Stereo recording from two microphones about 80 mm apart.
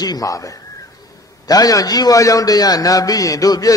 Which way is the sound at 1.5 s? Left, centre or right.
Left.